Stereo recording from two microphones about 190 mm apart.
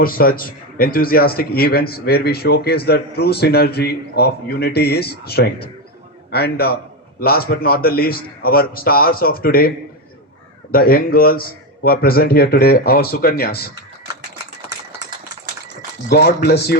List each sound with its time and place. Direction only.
0.0 s a man's voice: 50° left (ahead or behind)
16.0 s a man's voice: 55° left (ahead or behind)